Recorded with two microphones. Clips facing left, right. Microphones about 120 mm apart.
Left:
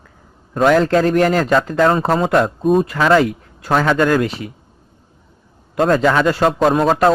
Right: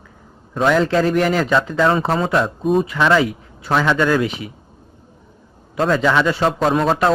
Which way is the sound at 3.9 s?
45° left (ahead or behind).